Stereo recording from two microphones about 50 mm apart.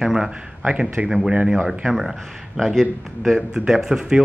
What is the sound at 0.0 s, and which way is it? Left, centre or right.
Speech, centre.